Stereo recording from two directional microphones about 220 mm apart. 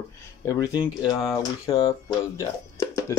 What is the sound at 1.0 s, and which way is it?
Speech, 20° left (ahead or behind).